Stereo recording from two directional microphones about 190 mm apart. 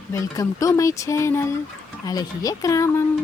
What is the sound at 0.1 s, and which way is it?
Speech, 15° left (ahead or behind).